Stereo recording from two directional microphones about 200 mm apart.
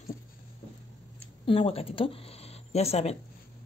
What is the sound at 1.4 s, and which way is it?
Speech, 25° left (ahead or behind).